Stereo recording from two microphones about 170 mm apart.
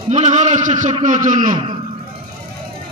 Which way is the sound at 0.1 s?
45° right (ahead or behind).